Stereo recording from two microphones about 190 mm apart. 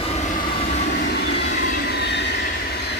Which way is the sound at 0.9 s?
60° left (ahead or behind).